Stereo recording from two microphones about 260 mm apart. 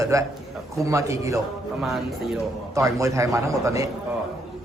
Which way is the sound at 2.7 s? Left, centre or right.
Centre.